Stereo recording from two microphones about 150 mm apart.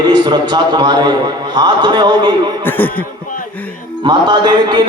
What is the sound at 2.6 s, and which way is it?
Speech, 10° left (ahead or behind).